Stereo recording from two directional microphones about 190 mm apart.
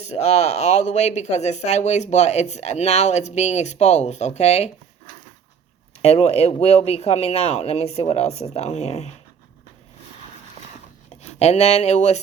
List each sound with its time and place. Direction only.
0.0 s speech: 35° left (ahead or behind)
6.0 s speech: 35° left (ahead or behind)
11.2 s speech: 35° left (ahead or behind)